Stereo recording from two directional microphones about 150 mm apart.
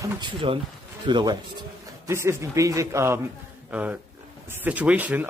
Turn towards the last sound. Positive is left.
turn(degrees=-10)  # may be behind; listen again after turning